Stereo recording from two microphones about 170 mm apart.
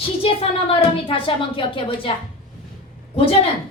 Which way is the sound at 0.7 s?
30° left (ahead or behind).